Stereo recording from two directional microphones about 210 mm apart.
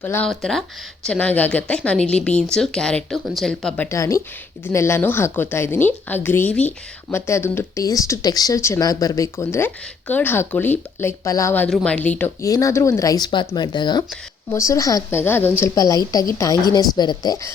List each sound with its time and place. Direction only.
0.0 s a woman's voice: 5° left (ahead or behind)